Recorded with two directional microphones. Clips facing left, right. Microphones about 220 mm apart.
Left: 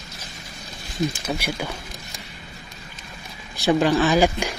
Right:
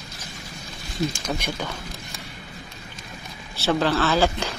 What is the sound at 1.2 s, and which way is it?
Speech, 10° left (ahead or behind).